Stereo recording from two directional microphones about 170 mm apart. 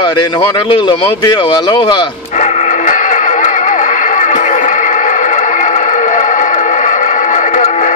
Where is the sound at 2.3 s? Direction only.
45° left (ahead or behind).